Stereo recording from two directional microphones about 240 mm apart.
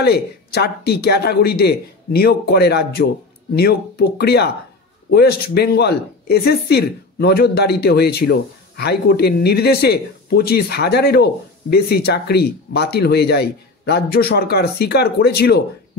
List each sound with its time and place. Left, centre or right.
0.0 s speech: left